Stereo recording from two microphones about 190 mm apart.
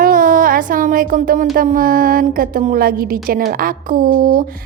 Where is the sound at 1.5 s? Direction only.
45° right (ahead or behind).